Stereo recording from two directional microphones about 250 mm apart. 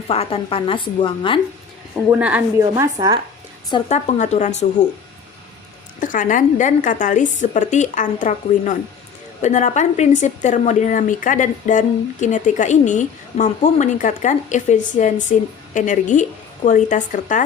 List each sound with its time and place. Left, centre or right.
0.1 s a woman's voice: left
2.0 s a woman's voice: centre
3.7 s a woman's voice: left
6.0 s a woman's voice: left